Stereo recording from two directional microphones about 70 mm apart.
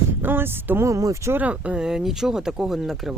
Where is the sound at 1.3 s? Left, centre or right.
Right.